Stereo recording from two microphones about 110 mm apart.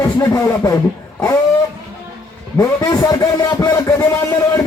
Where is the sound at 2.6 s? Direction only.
30° left (ahead or behind).